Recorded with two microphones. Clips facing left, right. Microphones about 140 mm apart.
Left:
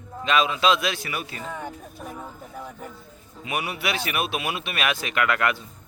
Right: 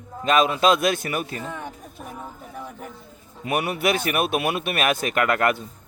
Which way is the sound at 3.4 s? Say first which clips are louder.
Right 5 dB; 50° right (ahead or behind).